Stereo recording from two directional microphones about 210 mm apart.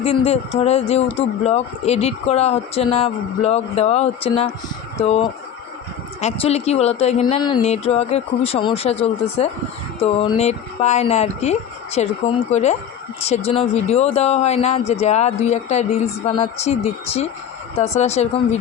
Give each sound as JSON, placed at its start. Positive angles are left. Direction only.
{"t": 0.0, "sound": "speech", "side_deg": 30}
{"t": 6.1, "sound": "speech", "side_deg": 30}